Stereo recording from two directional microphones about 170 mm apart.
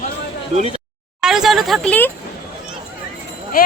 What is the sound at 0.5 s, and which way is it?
Speech, 40° right (ahead or behind).